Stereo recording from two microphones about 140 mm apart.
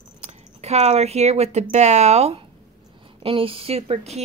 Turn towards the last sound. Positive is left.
turn(degrees=-50)  # may be behind; listen again after turning